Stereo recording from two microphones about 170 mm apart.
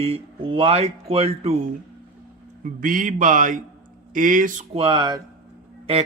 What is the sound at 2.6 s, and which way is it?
Speech, 50° right (ahead or behind).